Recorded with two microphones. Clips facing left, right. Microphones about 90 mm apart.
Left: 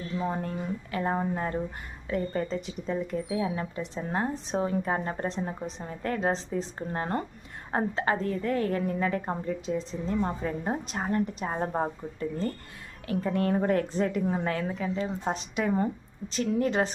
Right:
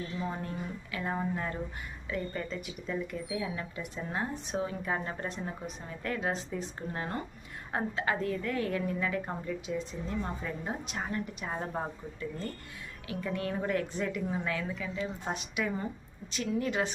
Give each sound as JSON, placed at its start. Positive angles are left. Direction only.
{"t": 0.2, "sound": "speech", "side_deg": 40}